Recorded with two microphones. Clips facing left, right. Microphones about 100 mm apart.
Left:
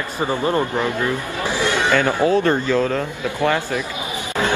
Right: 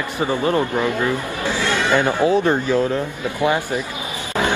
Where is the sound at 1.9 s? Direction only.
15° right (ahead or behind).